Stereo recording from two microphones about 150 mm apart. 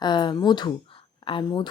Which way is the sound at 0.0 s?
30° left (ahead or behind).